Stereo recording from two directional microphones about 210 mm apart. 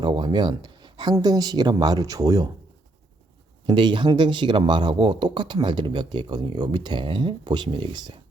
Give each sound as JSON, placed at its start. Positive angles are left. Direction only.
{"t": 0.0, "sound": "speech", "side_deg": -20}
{"t": 3.7, "sound": "speech", "side_deg": -20}